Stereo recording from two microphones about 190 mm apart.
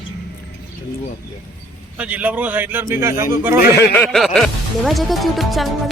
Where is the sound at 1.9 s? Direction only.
5° right (ahead or behind).